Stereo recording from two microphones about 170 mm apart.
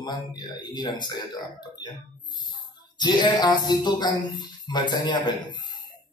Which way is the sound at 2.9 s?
25° left (ahead or behind).